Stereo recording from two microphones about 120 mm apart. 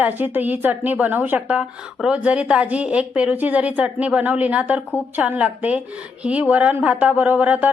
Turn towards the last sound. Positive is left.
turn(degrees=-15)  # may be behind; listen again after turning